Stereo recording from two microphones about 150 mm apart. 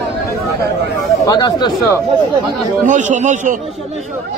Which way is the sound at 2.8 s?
55° right (ahead or behind).